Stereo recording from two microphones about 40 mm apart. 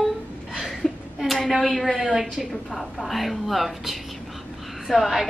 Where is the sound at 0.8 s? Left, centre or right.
Centre.